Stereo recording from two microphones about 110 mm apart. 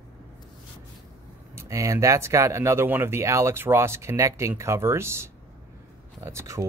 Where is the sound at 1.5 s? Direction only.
30° right (ahead or behind).